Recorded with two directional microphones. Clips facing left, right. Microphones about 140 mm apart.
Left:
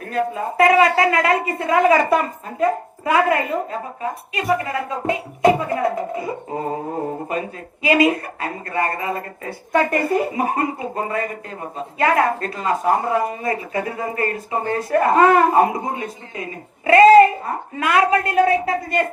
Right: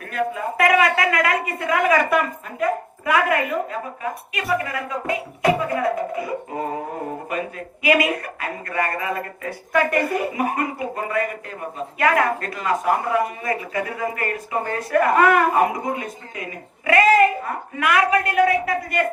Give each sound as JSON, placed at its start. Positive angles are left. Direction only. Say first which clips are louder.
{"t": 0.1, "sound": "a woman's voice", "louder": "left 2 dB", "side_deg": 30}